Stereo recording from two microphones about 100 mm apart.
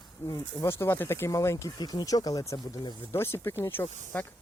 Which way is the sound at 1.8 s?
45° left (ahead or behind).